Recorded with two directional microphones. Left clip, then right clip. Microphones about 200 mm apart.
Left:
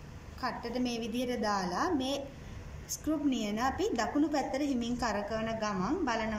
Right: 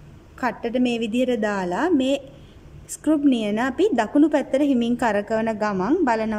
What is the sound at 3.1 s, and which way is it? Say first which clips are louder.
A woman's voice: right 13 dB; 55° right (ahead or behind).